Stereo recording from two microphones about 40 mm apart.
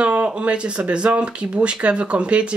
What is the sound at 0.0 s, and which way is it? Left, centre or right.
Speech, right.